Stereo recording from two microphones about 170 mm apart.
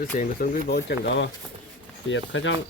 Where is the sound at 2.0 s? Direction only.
90° left.